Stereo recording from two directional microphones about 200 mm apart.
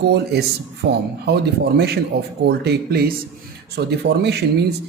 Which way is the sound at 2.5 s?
55° right (ahead or behind).